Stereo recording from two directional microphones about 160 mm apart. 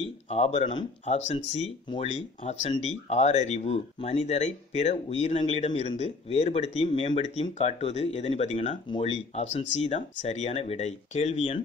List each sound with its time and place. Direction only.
0.0 s speech: 40° left (ahead or behind)
7.2 s speech: 45° left (ahead or behind)